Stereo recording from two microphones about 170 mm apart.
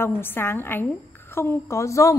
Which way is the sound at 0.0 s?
15° left (ahead or behind).